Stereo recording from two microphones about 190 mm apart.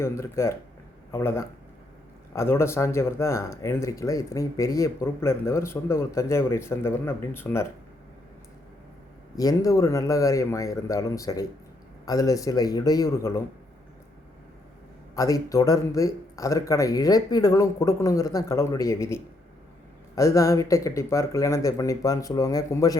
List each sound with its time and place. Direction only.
0.0 s speech: 15° left (ahead or behind)
9.3 s a man's voice: 20° left (ahead or behind)
15.1 s speech: 15° left (ahead or behind)